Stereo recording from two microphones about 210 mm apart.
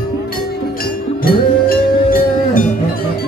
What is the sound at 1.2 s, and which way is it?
Cowbell, 45° left (ahead or behind).